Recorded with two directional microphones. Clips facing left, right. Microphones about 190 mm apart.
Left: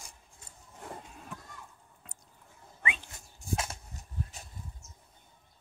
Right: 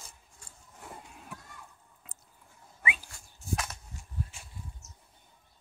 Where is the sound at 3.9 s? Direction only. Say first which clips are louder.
Even; 40° left (ahead or behind).